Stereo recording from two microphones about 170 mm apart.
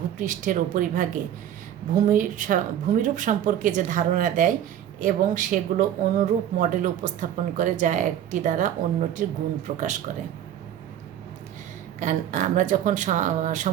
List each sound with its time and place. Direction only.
0.2 s speech: 50° right (ahead or behind)
2.0 s speech: 50° right (ahead or behind)
11.9 s speech: 45° right (ahead or behind)